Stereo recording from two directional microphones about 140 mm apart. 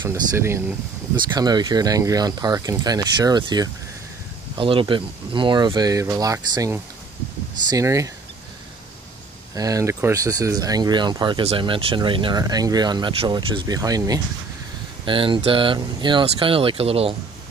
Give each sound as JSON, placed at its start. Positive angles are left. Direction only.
{"t": 0.0, "sound": "speech", "side_deg": -20}
{"t": 1.3, "sound": "speech", "side_deg": -30}
{"t": 9.6, "sound": "speech", "side_deg": -25}
{"t": 15.0, "sound": "speech", "side_deg": -35}